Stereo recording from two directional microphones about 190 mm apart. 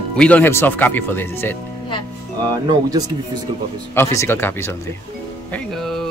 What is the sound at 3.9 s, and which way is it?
Speech, 15° left (ahead or behind).